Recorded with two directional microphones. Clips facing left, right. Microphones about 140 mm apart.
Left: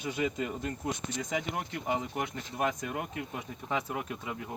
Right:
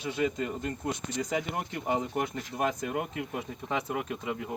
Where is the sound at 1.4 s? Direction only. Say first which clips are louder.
Right 2 dB; 25° right (ahead or behind).